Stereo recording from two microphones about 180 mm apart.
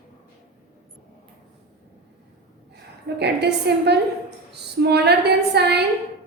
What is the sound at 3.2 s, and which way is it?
Speech, 70° right (ahead or behind).